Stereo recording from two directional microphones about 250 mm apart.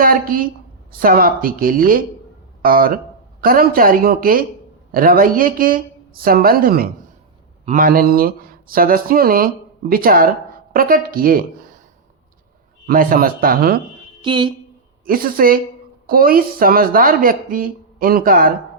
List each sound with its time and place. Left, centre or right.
0.0 s a woman's voice: right
12.9 s speech: right
14.2 s speech: centre
15.0 s speech: right